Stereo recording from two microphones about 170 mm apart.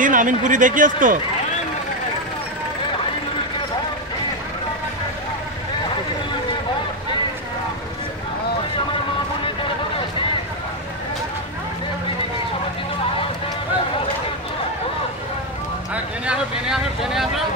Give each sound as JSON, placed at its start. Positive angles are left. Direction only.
{"t": 0.0, "sound": "speech", "side_deg": -50}
{"t": 15.9, "sound": "vehicle", "side_deg": -5}